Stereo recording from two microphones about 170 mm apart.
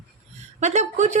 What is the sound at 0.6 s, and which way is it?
Speech, 45° right (ahead or behind).